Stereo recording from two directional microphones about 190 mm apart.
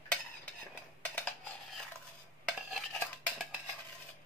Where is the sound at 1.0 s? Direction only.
10° left (ahead or behind).